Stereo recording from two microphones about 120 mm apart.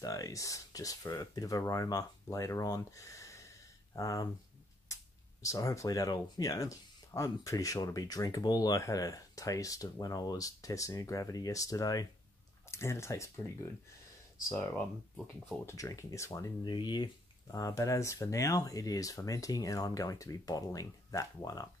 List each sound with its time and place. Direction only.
0.0 s speech: 30° left (ahead or behind)
5.4 s speech: 30° left (ahead or behind)
15.6 s speech: 30° left (ahead or behind)
16.6 s speech: 40° left (ahead or behind)